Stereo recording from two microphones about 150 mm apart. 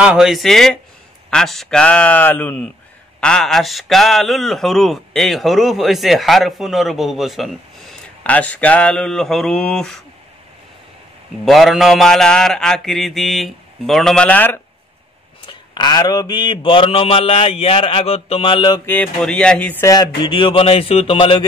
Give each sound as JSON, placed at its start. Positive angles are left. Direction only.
{"t": 0.0, "sound": "a man's voice", "side_deg": -5}
{"t": 11.4, "sound": "a man's voice", "side_deg": 0}
{"t": 15.4, "sound": "mantra", "side_deg": 30}
{"t": 18.9, "sound": "a man's voice", "side_deg": 10}
{"t": 20.2, "sound": "mantra", "side_deg": 35}